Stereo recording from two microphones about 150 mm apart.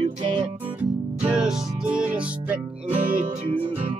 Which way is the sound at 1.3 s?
5° right (ahead or behind).